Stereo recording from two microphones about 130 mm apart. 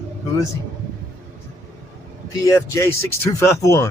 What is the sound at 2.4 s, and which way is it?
Speech, 20° left (ahead or behind).